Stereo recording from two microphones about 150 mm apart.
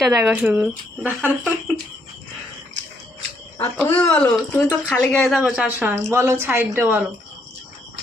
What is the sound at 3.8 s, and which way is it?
A woman's voice, 10° left (ahead or behind).